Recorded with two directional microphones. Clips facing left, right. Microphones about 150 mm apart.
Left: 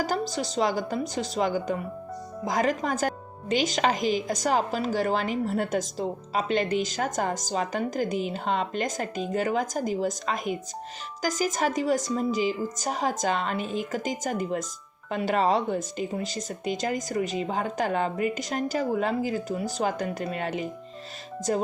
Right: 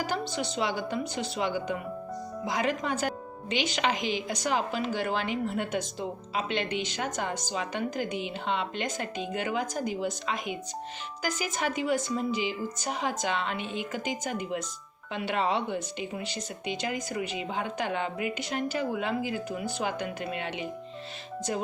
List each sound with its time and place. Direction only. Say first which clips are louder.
0.0 s a woman's voice: left 3 dB; 40° left (ahead or behind)